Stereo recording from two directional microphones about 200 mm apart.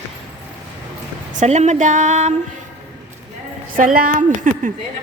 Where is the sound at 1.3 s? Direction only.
35° right (ahead or behind).